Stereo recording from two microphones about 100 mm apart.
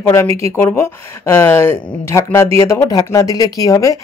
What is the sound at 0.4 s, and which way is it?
Speech, 25° left (ahead or behind).